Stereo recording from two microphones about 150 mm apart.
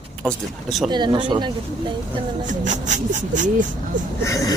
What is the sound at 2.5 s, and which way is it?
Speech, 55° right (ahead or behind).